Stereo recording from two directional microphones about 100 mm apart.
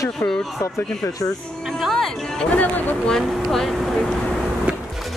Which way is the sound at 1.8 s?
Centre (ahead or behind).